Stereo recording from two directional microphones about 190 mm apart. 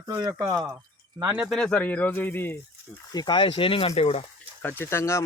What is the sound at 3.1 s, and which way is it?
Speech, 20° left (ahead or behind).